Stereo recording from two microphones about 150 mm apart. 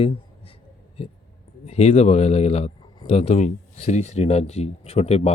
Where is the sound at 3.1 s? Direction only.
45° left (ahead or behind).